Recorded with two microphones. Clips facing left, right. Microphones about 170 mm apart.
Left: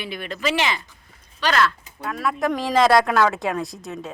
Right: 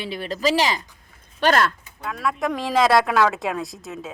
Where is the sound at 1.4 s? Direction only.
50° right (ahead or behind).